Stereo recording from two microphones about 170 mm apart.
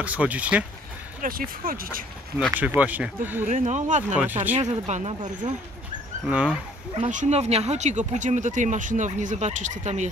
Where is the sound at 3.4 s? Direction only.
45° right (ahead or behind).